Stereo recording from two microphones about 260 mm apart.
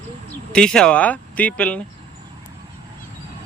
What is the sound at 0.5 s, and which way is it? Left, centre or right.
Speech, centre.